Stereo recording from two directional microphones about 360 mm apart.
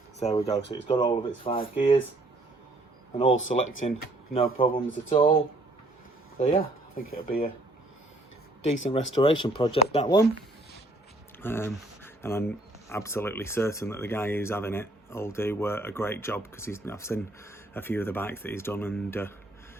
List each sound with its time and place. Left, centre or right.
0.2 s speech: centre
3.2 s speech: left
6.4 s speech: left
8.9 s speech: centre
11.4 s speech: centre